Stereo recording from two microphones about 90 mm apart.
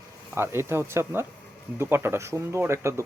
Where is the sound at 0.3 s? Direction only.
25° right (ahead or behind).